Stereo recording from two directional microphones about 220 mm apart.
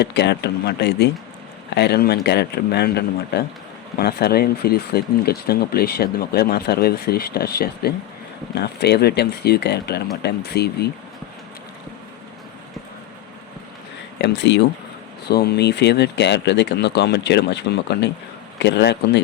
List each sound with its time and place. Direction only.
0.0 s speech: 50° left (ahead or behind)
14.2 s speech: 50° left (ahead or behind)